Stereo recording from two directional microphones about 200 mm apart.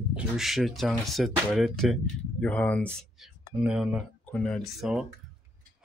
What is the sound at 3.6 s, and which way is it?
Speech, 5° right (ahead or behind).